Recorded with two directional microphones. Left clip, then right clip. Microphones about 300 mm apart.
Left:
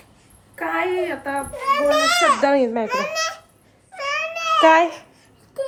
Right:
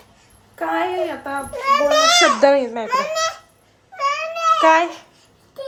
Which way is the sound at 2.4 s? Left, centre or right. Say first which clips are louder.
Right 3 dB; centre.